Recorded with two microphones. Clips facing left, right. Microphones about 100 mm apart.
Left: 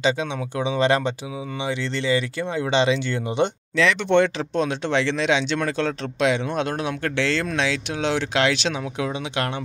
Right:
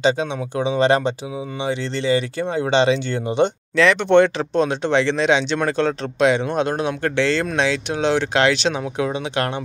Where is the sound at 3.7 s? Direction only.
45° right (ahead or behind).